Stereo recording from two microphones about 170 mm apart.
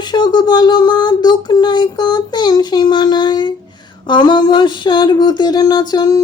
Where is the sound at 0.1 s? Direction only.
25° left (ahead or behind).